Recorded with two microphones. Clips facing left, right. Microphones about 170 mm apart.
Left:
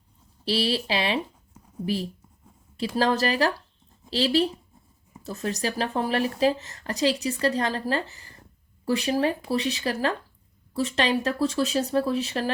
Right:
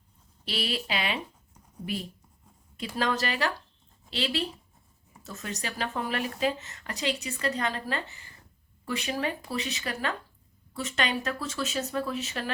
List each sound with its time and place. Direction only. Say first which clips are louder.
0.4 s speech: left 7 dB; 30° left (ahead or behind)